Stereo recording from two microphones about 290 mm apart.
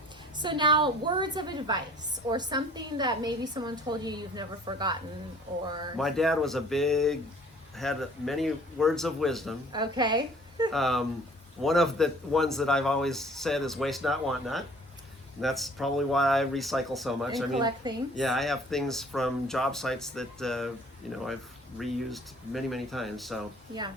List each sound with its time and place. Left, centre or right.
0.3 s a woman's voice: centre
6.0 s speech: centre
9.7 s a woman's voice: centre
10.7 s speech: centre
17.6 s a woman's voice: centre
18.2 s speech: centre